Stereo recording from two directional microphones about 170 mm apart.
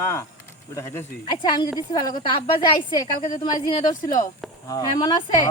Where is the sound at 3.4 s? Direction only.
25° left (ahead or behind).